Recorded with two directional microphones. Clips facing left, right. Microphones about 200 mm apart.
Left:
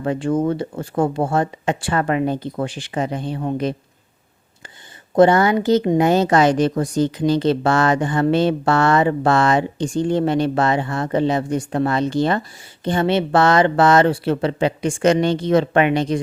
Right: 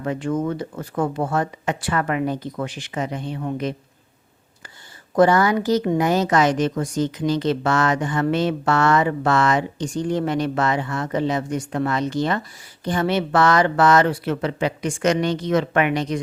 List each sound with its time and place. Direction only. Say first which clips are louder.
0.0 s speech: left 4 dB; 30° left (ahead or behind)
5.1 s a woman's voice: left 3 dB; 25° left (ahead or behind)